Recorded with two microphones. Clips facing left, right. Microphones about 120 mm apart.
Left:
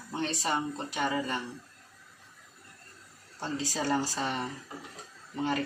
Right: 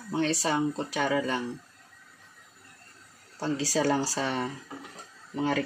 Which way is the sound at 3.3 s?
90° right.